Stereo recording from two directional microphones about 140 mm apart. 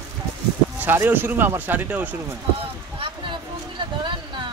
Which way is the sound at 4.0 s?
35° right (ahead or behind).